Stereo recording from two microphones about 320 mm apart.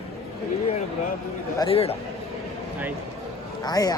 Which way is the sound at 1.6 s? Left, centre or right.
Centre.